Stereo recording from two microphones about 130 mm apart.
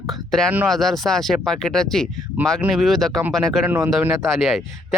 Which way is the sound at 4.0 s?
5° right (ahead or behind).